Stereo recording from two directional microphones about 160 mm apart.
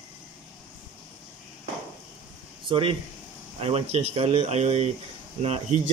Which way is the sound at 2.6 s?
30° right (ahead or behind).